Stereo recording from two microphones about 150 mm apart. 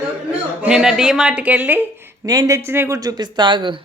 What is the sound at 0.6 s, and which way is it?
A woman's voice, 5° right (ahead or behind).